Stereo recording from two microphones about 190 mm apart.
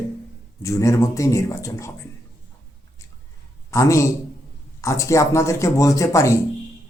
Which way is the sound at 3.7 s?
15° left (ahead or behind).